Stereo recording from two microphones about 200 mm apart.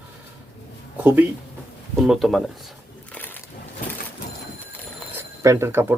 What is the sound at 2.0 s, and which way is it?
Speech, centre (ahead or behind).